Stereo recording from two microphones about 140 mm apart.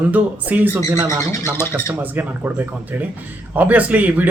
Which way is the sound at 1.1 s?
20° left (ahead or behind).